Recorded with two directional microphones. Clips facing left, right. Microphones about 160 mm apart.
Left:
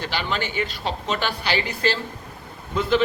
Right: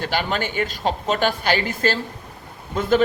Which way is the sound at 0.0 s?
45° right (ahead or behind).